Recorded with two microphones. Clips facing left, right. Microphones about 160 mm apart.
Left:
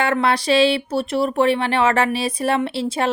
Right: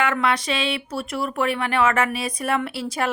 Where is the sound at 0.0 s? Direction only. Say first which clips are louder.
Left 3 dB; 35° left (ahead or behind).